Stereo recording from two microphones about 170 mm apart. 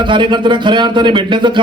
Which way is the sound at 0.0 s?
25° right (ahead or behind).